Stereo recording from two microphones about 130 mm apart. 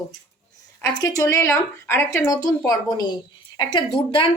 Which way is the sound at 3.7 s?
45° left (ahead or behind).